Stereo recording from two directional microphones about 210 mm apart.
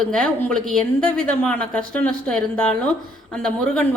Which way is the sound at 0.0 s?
5° left (ahead or behind).